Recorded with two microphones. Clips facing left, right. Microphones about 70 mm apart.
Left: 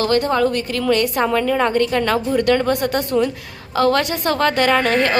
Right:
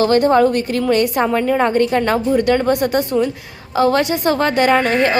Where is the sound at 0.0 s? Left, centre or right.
Right.